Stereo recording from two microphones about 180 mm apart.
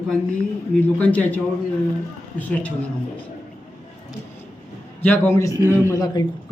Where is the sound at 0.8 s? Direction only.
10° left (ahead or behind).